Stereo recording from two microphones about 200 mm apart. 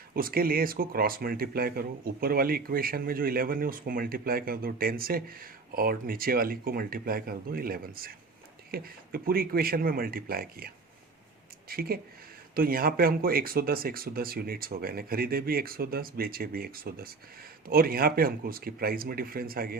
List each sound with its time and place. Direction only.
0.2 s speech: 45° right (ahead or behind)
11.7 s speech: 50° right (ahead or behind)